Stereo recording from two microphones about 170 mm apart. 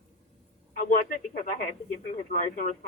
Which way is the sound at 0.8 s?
50° left (ahead or behind).